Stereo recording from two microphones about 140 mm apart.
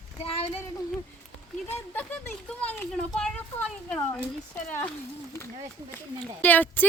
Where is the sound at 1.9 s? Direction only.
10° left (ahead or behind).